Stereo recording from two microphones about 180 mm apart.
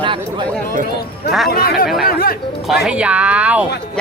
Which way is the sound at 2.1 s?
55° left (ahead or behind).